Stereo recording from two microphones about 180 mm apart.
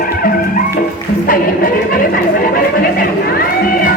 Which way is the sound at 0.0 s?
50° left (ahead or behind).